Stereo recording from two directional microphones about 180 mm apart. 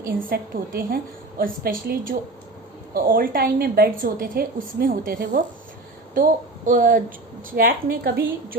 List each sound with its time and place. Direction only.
0.2 s a woman's voice: 55° right (ahead or behind)
6.7 s a woman's voice: 50° right (ahead or behind)